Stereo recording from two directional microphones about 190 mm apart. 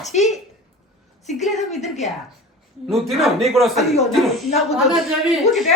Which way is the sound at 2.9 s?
Centre (ahead or behind).